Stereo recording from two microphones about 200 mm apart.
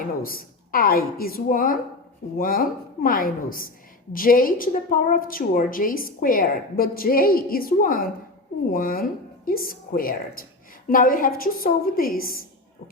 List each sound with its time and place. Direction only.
0.2 s a woman's voice: 45° left (ahead or behind)